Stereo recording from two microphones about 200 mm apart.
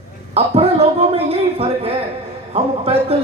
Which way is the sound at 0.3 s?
30° right (ahead or behind).